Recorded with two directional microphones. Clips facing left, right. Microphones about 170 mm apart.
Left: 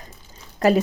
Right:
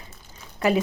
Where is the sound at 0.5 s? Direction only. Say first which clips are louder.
Left 4 dB; 40° left (ahead or behind).